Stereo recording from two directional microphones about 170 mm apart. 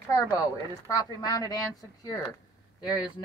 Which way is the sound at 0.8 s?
20° left (ahead or behind).